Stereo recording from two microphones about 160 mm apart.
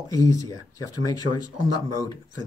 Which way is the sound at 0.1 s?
20° left (ahead or behind).